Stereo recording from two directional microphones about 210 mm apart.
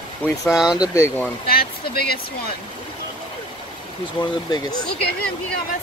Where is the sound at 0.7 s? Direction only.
15° left (ahead or behind).